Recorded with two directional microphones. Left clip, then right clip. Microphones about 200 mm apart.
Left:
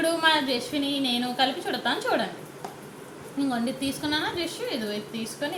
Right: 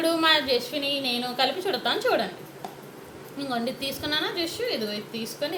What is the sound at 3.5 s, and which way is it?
A woman's voice, 35° right (ahead or behind).